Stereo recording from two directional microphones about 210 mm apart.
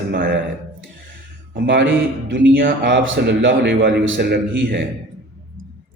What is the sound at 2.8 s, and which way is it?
A man's voice, 60° right (ahead or behind).